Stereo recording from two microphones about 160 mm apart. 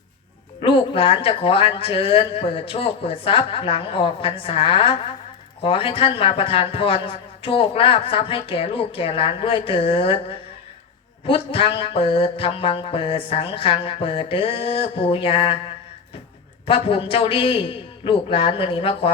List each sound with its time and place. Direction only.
0.6 s a man's voice: 35° left (ahead or behind)
16.6 s a man's voice: 35° left (ahead or behind)